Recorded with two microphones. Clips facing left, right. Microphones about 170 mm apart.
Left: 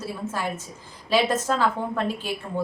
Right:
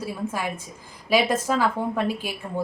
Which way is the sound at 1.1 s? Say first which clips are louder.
Right 1 dB; 10° right (ahead or behind).